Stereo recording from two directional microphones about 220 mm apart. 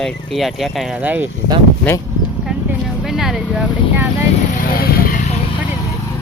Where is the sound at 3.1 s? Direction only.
Centre (ahead or behind).